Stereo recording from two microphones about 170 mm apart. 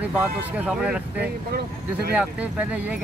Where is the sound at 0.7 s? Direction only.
5° right (ahead or behind).